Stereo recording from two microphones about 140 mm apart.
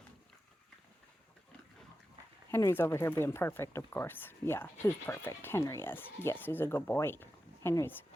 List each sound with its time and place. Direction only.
2.5 s speech: 20° left (ahead or behind)